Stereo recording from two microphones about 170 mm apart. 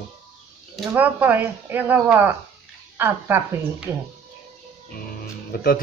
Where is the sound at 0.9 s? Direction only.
10° right (ahead or behind).